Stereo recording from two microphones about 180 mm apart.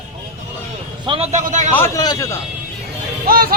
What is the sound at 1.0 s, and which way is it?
Speech, 30° right (ahead or behind).